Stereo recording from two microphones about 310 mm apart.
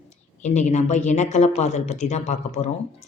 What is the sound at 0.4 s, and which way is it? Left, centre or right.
Speech, left.